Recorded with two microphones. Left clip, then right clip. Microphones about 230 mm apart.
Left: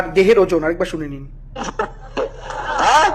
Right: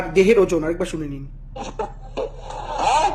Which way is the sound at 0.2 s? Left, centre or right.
Centre.